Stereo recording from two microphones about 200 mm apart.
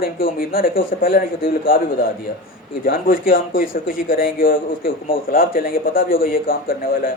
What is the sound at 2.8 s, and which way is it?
A man's voice, 45° left (ahead or behind).